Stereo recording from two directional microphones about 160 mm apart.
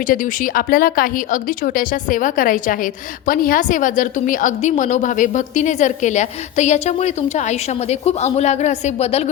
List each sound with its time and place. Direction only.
0.1 s a woman's voice: 55° left (ahead or behind)